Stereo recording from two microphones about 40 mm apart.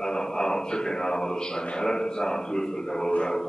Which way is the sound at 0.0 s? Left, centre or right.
Centre.